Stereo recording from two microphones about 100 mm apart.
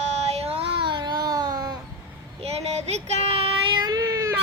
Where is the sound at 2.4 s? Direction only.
90° right; by 4.2 s 35° right (ahead or behind).